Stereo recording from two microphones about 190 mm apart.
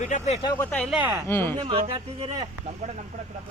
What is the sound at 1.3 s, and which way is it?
Speech, 10° left (ahead or behind).